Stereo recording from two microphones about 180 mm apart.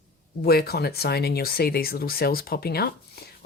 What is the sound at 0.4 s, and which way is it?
Speech, 60° left (ahead or behind).